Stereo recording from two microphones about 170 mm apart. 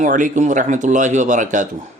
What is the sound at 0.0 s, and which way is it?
Speech, 50° right (ahead or behind).